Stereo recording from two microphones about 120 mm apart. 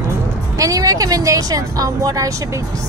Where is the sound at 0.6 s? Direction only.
30° right (ahead or behind).